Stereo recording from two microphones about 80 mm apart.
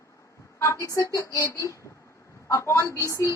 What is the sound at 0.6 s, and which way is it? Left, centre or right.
A woman's voice, left.